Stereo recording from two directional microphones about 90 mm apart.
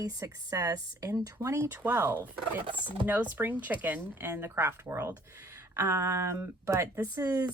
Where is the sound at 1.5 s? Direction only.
25° right (ahead or behind).